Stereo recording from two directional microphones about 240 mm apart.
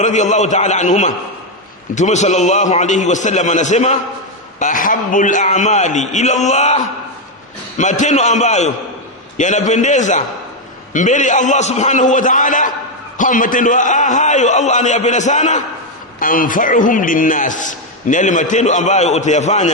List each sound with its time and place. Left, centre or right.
0.0 s a man's voice: left